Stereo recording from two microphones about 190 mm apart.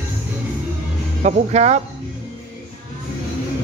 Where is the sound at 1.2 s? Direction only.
40° right (ahead or behind).